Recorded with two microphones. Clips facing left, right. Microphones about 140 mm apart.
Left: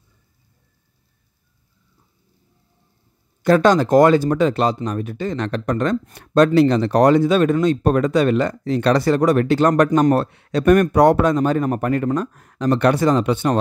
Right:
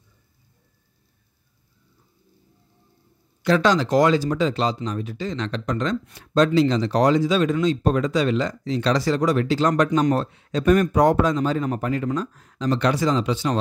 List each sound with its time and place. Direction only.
3.4 s speech: 50° left (ahead or behind)